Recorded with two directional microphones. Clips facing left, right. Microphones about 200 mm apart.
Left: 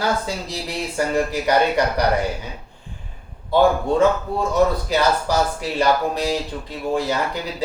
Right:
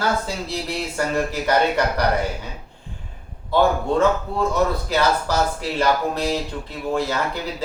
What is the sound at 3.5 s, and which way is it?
Speech, 15° left (ahead or behind).